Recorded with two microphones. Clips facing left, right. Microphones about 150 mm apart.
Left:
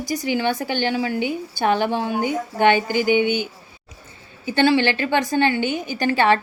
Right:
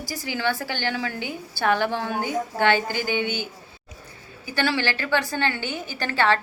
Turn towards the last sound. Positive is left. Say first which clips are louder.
# left 5 dB
turn(degrees=15)  # may be behind; listen again after turning